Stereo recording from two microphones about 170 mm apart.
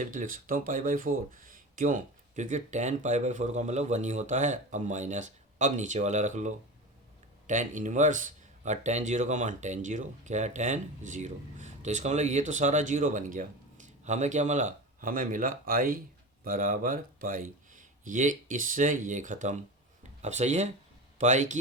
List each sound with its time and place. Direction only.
0.0 s speech: 50° right (ahead or behind)